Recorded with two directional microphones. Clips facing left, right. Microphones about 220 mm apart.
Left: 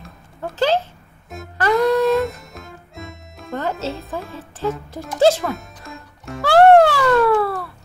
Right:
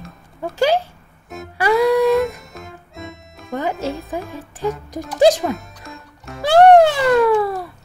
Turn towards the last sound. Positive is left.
turn(degrees=-15)  # may be behind; listen again after turning